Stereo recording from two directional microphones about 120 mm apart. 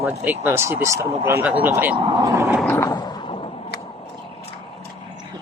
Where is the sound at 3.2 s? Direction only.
50° left (ahead or behind).